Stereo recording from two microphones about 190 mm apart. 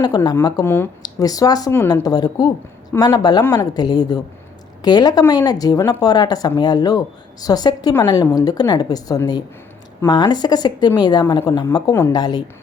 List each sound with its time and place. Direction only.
0.0 s speech: 20° left (ahead or behind)